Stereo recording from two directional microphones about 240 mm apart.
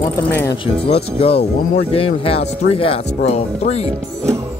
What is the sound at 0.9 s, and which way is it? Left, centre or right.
Speech, left.